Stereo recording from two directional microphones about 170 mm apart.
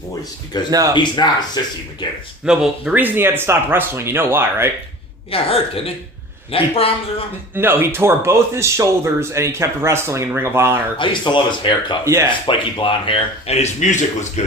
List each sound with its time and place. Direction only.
0.5 s speech: 25° left (ahead or behind)
2.4 s speech: 5° right (ahead or behind)
5.3 s a man's voice: 35° left (ahead or behind)
7.5 s speech: 10° right (ahead or behind)
10.9 s speech: 30° left (ahead or behind)
12.0 s speech: 15° right (ahead or behind)
12.5 s a man's voice: 30° left (ahead or behind)